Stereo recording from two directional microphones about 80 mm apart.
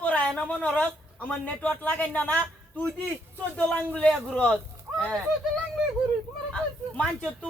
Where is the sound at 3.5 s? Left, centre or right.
Centre.